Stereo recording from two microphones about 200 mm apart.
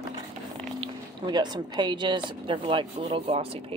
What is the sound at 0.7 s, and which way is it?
Speech, 20° right (ahead or behind).